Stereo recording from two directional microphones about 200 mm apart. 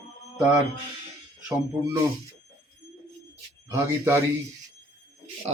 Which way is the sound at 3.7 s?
10° right (ahead or behind).